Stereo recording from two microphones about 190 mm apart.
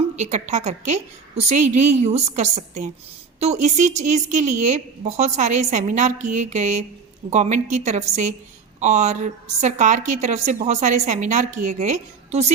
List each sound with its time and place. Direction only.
0.2 s a woman's voice: 35° right (ahead or behind)